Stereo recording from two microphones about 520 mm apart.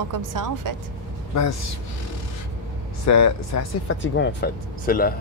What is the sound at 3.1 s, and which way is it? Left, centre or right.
Speech, left.